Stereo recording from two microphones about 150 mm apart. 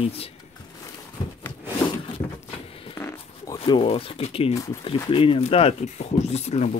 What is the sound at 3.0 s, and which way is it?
Zipper, 15° left (ahead or behind).